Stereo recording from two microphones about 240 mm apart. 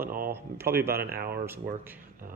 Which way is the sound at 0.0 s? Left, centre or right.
Right.